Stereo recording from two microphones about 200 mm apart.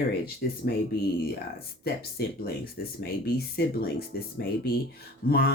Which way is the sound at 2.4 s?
50° left (ahead or behind).